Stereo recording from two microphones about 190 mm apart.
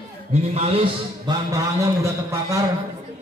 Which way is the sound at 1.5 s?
15° right (ahead or behind).